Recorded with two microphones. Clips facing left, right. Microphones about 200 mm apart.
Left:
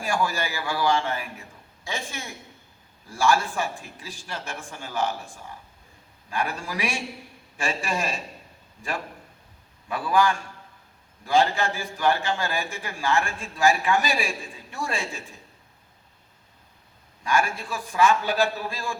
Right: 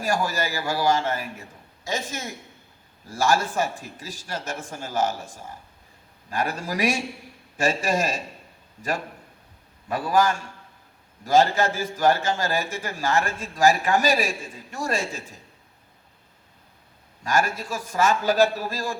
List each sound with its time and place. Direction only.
0.0 s a man's voice: 40° right (ahead or behind)
9.9 s a man's voice: 40° right (ahead or behind)
17.2 s a man's voice: 40° right (ahead or behind)